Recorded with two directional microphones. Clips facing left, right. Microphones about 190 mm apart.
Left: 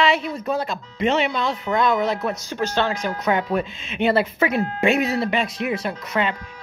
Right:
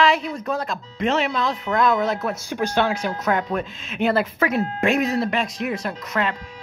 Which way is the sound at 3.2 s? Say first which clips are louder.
Left 3 dB; 5° left (ahead or behind).